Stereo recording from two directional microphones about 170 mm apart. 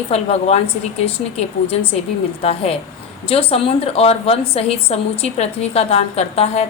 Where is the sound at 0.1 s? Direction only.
40° left (ahead or behind).